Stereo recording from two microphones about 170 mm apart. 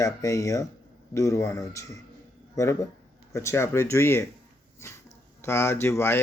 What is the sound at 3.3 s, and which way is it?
Speech, 15° left (ahead or behind).